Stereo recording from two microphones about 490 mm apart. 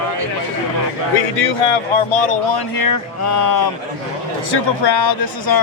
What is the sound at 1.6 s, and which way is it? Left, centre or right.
Speech, left.